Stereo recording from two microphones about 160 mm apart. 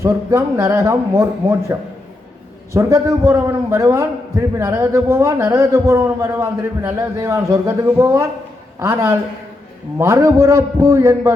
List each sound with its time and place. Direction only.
0.0 s a man's voice: 15° right (ahead or behind)
2.7 s a man's voice: 20° right (ahead or behind)